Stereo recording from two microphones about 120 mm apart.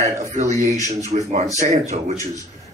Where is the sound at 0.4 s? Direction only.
75° right (ahead or behind).